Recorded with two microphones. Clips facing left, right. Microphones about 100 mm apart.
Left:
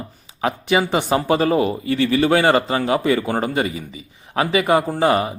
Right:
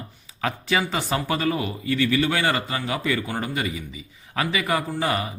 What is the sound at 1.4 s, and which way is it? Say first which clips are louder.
A man's voice: left 7 dB; 30° left (ahead or behind).